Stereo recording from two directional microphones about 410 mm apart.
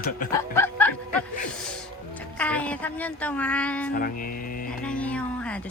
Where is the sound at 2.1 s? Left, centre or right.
Centre.